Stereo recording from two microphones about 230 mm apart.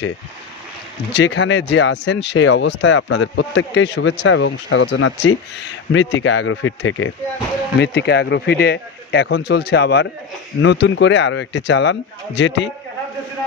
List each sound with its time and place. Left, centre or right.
1.1 s speech: left